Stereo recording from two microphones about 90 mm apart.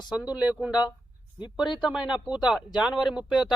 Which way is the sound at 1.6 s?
55° left (ahead or behind).